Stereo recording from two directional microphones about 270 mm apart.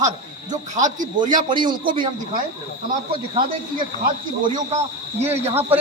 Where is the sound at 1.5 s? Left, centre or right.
Centre.